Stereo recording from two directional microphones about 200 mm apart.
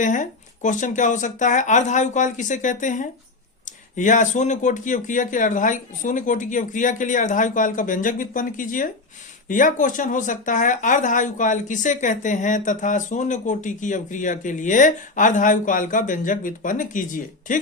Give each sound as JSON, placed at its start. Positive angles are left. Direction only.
{"t": 0.0, "sound": "speech", "side_deg": 40}